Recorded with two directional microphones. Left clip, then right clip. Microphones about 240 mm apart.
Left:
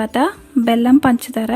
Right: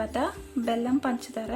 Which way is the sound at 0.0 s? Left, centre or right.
Left.